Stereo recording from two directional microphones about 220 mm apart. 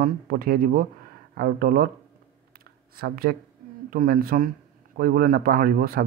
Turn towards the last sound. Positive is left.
turn(degrees=-40)  # may be behind; listen again after turning